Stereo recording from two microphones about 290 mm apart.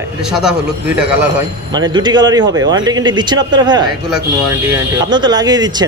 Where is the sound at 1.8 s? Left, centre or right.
Centre.